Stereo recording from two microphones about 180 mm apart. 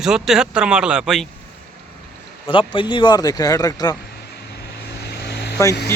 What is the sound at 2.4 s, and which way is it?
Speech, 30° left (ahead or behind).